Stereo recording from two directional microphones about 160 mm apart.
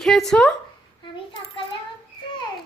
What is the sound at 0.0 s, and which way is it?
Speech, centre (ahead or behind).